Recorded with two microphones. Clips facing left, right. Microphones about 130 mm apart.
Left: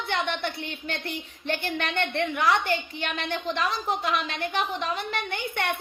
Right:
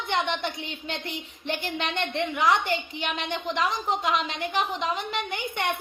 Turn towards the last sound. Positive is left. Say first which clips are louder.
# even
turn(degrees=-15)  # may be behind; listen again after turning